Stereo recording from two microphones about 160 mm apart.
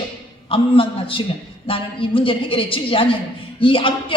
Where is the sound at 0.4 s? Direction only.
35° left (ahead or behind).